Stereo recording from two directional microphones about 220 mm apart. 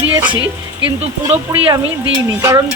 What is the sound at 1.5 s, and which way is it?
Speech, 15° right (ahead or behind).